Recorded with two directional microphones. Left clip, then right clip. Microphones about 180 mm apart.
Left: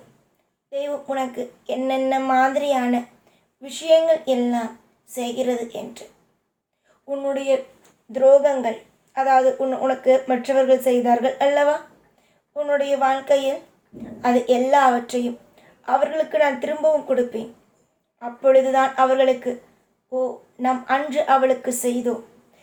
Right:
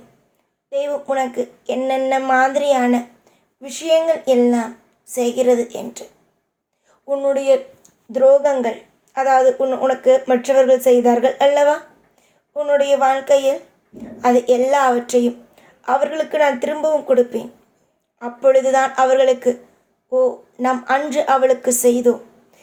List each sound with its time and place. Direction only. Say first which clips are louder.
0.7 s a woman's voice: right 5 dB; 30° right (ahead or behind)
7.1 s a woman's voice: right 6 dB; 25° right (ahead or behind)